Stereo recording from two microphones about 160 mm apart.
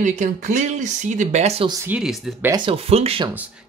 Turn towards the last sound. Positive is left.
turn(degrees=-40)  # may be behind; listen again after turning